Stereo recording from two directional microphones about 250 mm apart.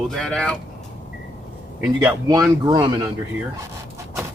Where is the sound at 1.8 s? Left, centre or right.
Centre.